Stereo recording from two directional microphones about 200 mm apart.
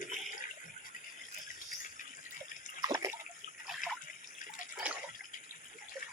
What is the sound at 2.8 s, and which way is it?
Water, 15° right (ahead or behind).